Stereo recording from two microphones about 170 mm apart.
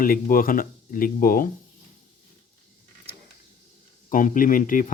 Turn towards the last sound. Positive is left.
turn(degrees=50)  # may be behind; listen again after turning